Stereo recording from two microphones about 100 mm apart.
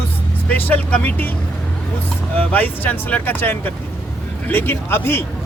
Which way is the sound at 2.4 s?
15° left (ahead or behind).